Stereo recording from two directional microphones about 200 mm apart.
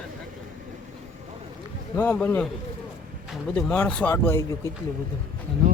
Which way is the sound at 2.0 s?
10° left (ahead or behind).